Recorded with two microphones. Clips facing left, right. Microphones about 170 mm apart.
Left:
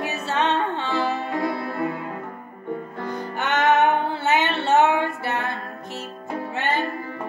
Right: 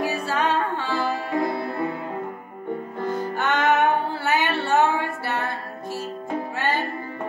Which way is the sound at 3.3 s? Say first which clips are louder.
Left 2 dB; 20° left (ahead or behind).